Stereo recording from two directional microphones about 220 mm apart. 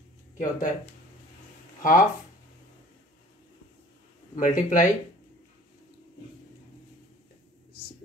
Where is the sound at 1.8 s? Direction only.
35° left (ahead or behind).